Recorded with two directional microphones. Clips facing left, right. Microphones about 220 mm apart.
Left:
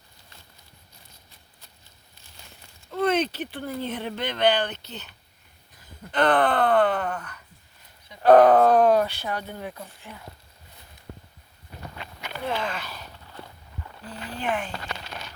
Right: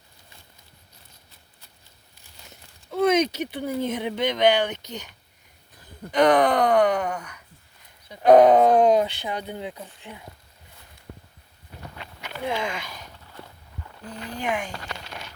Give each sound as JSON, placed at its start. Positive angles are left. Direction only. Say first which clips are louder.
{"t": 2.9, "sound": "speech", "louder": "right 3 dB", "side_deg": -10}
{"t": 12.5, "sound": "speech", "louder": "right 1 dB", "side_deg": -10}
{"t": 14.1, "sound": "speech", "louder": "right 1 dB", "side_deg": -10}